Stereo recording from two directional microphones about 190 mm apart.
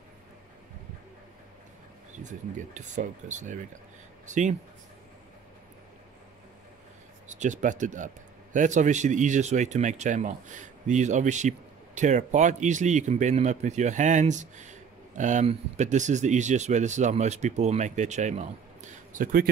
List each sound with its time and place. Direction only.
2.1 s speech: 40° right (ahead or behind)
7.2 s speech: 40° right (ahead or behind)